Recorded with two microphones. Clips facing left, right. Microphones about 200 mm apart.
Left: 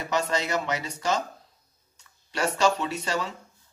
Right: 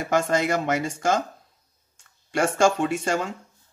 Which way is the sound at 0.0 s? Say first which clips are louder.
Right 5 dB; 50° right (ahead or behind).